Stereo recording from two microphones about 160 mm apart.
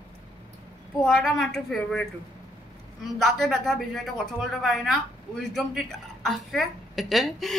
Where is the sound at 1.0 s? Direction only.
Centre (ahead or behind).